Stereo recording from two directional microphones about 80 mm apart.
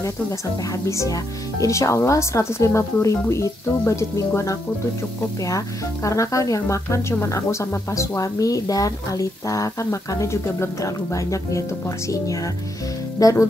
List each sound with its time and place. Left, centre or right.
0.8 s a woman's voice: left
6.0 s a woman's voice: left
13.2 s a woman's voice: left